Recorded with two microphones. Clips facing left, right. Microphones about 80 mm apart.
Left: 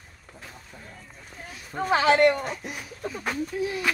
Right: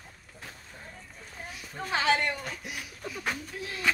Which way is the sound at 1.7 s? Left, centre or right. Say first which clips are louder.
Left 7 dB; left.